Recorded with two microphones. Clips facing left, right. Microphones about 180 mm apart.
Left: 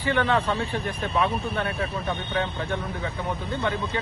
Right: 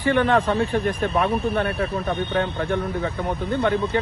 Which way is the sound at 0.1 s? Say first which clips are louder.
Right 4 dB; 55° right (ahead or behind).